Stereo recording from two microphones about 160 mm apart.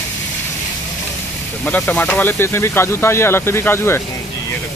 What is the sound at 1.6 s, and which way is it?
Speech, 5° left (ahead or behind).